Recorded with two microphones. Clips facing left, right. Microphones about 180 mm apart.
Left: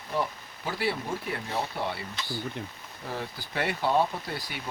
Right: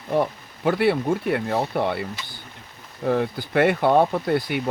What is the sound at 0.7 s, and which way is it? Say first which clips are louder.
Speech: right 11 dB; 60° right (ahead or behind).